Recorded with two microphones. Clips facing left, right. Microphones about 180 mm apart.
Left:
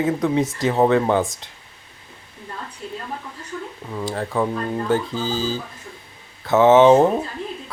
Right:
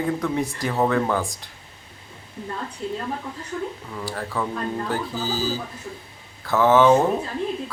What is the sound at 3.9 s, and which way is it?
Speech, 20° left (ahead or behind).